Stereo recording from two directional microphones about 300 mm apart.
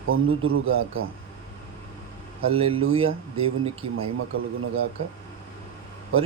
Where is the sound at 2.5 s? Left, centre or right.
Centre.